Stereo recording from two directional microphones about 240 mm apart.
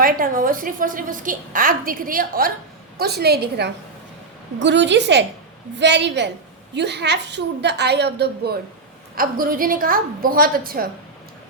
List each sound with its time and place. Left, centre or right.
0.0 s a woman's voice: right